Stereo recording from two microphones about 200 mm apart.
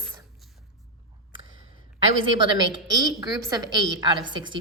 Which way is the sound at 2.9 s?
20° right (ahead or behind).